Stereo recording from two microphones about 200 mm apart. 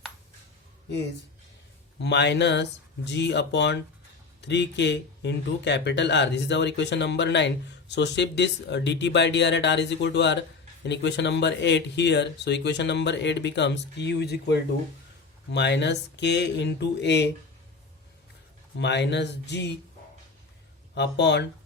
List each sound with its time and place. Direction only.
2.0 s speech: 60° left (ahead or behind)
18.8 s speech: 60° left (ahead or behind)
20.9 s speech: 60° left (ahead or behind)